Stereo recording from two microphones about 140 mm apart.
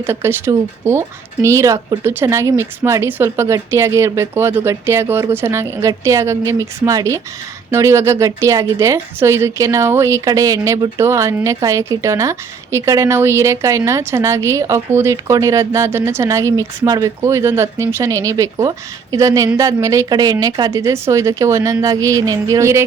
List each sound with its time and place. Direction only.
0.0 s a woman's voice: 15° right (ahead or behind)